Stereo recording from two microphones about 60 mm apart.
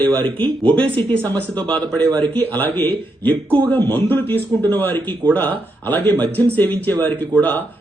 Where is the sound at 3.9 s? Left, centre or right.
Left.